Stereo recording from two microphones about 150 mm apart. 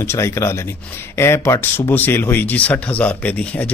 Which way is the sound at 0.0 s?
15° left (ahead or behind).